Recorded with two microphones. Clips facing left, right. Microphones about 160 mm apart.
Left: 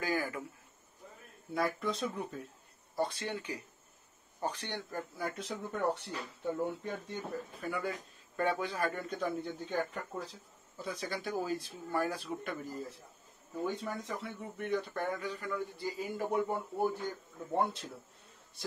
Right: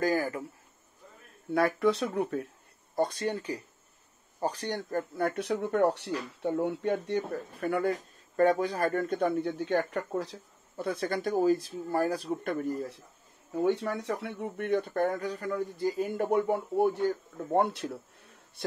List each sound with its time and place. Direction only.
0.0 s speech: 40° right (ahead or behind)
1.5 s speech: 70° right (ahead or behind)
3.0 s speech: 40° right (ahead or behind); by 7.9 s 55° right (ahead or behind)
8.4 s speech: 40° right (ahead or behind)
13.6 s speech: 75° right (ahead or behind); by 16.1 s 45° right (ahead or behind)
16.2 s speech: 70° right (ahead or behind)